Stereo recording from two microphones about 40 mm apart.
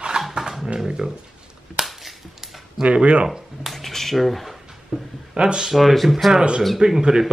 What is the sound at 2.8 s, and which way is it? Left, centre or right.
Speech, right.